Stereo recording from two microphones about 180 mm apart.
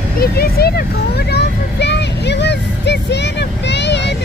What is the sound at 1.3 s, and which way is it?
Speech, 70° left (ahead or behind).